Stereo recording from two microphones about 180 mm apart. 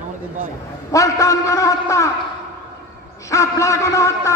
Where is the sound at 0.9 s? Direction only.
15° left (ahead or behind).